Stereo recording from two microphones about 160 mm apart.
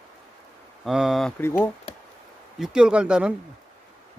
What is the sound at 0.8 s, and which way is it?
Speech, centre (ahead or behind).